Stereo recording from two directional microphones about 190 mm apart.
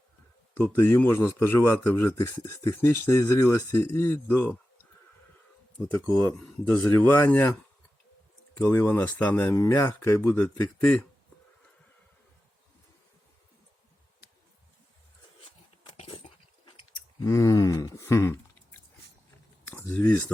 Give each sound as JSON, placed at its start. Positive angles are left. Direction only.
{"t": 0.5, "sound": "speech", "side_deg": 10}
{"t": 5.9, "sound": "speech", "side_deg": 5}
{"t": 8.5, "sound": "speech", "side_deg": 10}
{"t": 15.8, "sound": "dog", "side_deg": 30}
{"t": 17.2, "sound": "a sound", "side_deg": 15}
{"t": 19.6, "sound": "speech", "side_deg": 10}